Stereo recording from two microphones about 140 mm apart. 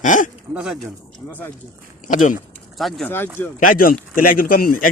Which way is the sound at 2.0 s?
65° left (ahead or behind).